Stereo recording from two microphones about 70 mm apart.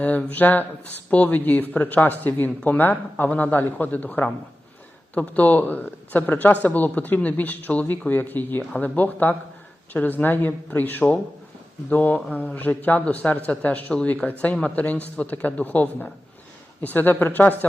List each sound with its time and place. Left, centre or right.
0.0 s speech: left